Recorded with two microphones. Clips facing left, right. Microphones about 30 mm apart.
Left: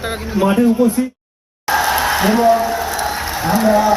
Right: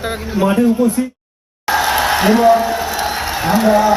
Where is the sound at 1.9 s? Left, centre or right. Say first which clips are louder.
Right 2 dB; right.